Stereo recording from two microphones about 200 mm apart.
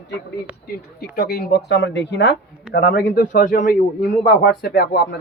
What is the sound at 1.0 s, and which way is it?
A man's voice, 50° left (ahead or behind).